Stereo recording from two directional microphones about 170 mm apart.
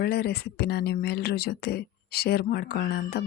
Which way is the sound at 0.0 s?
70° left (ahead or behind).